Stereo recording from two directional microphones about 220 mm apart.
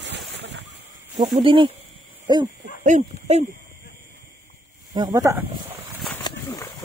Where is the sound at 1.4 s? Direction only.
25° right (ahead or behind).